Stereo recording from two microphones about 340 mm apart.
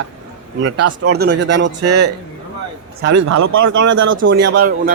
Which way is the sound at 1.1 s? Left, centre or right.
Right.